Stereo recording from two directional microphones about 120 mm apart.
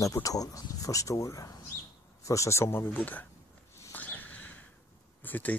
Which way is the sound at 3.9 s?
15° left (ahead or behind).